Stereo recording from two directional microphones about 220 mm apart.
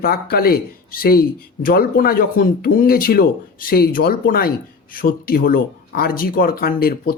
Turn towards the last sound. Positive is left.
turn(degrees=45)  # may be behind; listen again after turning